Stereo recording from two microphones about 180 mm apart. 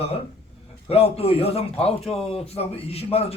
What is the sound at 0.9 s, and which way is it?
A man's voice, 35° left (ahead or behind).